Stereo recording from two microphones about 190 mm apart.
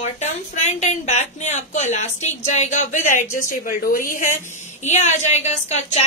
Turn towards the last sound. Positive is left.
turn(degrees=35)  # may be behind; listen again after turning